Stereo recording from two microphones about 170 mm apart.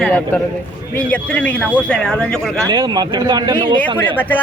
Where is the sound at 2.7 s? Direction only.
25° right (ahead or behind).